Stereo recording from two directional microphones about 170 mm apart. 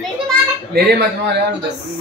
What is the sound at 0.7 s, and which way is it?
Speech, 75° right (ahead or behind).